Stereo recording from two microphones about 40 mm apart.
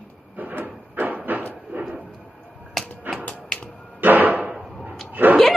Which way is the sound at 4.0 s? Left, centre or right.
Right.